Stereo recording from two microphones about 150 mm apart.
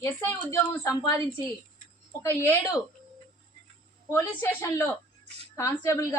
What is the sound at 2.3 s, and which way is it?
Speech, 20° left (ahead or behind).